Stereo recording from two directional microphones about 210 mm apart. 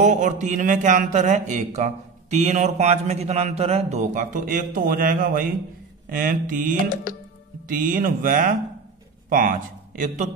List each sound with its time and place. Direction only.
0.0 s speech: 35° right (ahead or behind)